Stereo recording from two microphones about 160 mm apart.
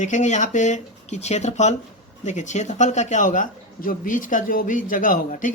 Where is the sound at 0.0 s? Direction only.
50° left (ahead or behind).